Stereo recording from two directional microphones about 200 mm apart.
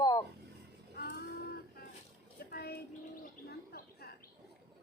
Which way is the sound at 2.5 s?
50° left (ahead or behind).